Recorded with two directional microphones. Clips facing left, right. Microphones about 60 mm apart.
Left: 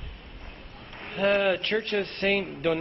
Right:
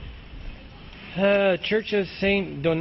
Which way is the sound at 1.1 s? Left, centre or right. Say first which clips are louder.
Right 4 dB; centre.